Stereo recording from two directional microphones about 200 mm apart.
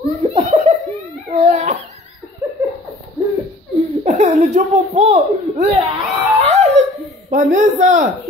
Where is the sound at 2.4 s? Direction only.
15° right (ahead or behind).